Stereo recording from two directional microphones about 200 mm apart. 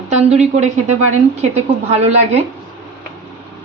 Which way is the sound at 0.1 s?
35° right (ahead or behind).